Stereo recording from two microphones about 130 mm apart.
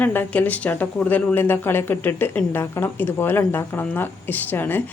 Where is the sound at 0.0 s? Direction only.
15° left (ahead or behind).